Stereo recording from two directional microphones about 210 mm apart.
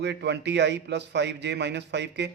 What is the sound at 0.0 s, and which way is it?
A man's voice, 55° right (ahead or behind).